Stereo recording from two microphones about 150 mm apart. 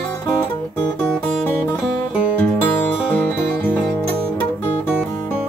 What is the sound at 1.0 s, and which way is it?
Music, 5° left (ahead or behind).